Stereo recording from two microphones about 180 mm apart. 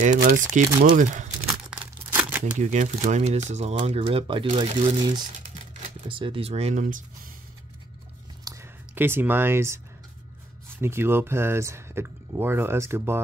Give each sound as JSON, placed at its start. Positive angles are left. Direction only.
{"t": 0.0, "sound": "speech", "side_deg": -50}
{"t": 1.5, "sound": "crumpling", "side_deg": -5}
{"t": 2.6, "sound": "speech", "side_deg": -40}
{"t": 8.5, "sound": "a sound", "side_deg": -15}
{"t": 10.8, "sound": "speech", "side_deg": -15}